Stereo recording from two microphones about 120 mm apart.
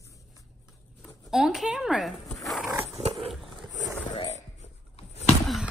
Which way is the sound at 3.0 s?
60° right (ahead or behind).